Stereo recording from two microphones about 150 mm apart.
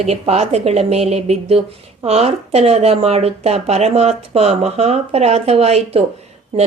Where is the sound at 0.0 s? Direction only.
45° right (ahead or behind).